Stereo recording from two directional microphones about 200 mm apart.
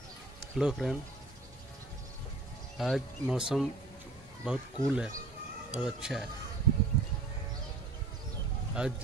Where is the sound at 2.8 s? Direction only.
Centre (ahead or behind).